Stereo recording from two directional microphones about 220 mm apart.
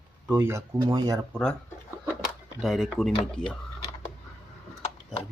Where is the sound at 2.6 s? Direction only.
Centre (ahead or behind).